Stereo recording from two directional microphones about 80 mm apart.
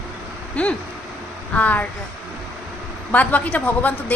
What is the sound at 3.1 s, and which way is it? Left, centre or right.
A woman's voice, left.